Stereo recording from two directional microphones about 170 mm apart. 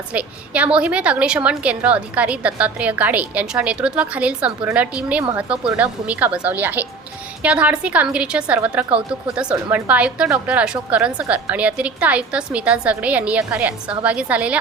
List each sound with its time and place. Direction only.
0.1 s a woman's voice: 10° right (ahead or behind)
5.5 s a woman's voice: 5° right (ahead or behind)